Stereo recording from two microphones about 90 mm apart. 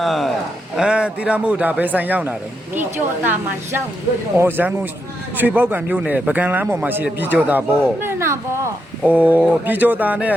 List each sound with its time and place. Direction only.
0.0 s speech: centre (ahead or behind)
0.8 s speech: 10° right (ahead or behind)
4.4 s a man's voice: 25° right (ahead or behind)
9.0 s a man's voice: 20° right (ahead or behind)